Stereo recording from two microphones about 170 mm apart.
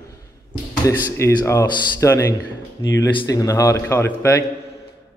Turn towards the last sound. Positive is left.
turn(degrees=15)  # may be behind; listen again after turning